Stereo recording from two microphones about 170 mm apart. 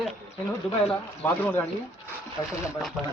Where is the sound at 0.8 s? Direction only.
10° left (ahead or behind).